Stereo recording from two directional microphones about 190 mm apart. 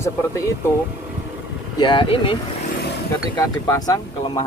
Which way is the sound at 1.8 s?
25° left (ahead or behind).